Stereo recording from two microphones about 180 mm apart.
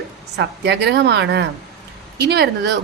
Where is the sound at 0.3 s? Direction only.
70° right (ahead or behind).